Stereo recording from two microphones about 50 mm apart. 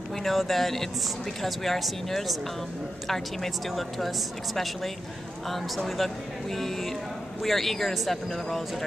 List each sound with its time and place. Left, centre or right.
0.1 s speech: centre